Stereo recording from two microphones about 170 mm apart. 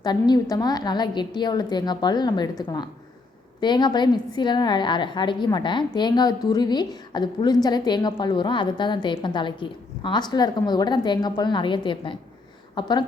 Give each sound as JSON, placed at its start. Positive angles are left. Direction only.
{"t": 0.0, "sound": "a woman's voice", "side_deg": 25}